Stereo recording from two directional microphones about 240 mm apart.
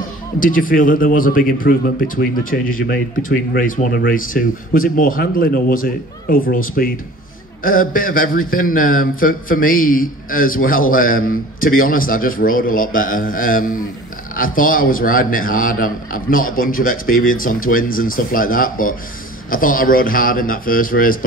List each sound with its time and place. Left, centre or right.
0.4 s speech: left